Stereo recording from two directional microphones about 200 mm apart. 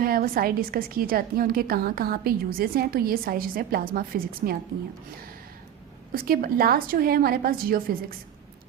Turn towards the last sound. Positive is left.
turn(degrees=-45)  # may be behind; listen again after turning